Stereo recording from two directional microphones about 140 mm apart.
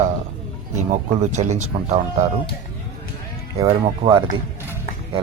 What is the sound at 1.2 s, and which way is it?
Speech, 55° right (ahead or behind).